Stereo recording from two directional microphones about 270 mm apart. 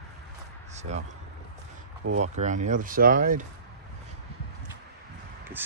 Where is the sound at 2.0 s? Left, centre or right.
Right.